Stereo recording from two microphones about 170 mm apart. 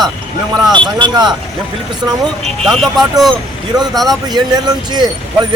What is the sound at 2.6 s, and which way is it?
Speech, centre (ahead or behind).